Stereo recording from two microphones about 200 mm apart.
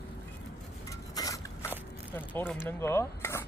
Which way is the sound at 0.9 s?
15° left (ahead or behind).